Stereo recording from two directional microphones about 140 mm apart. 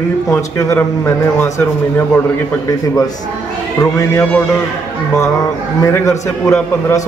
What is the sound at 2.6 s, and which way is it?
A man's voice, 25° left (ahead or behind).